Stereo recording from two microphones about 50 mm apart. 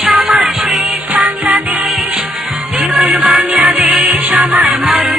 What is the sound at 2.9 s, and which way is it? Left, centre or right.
Music, centre.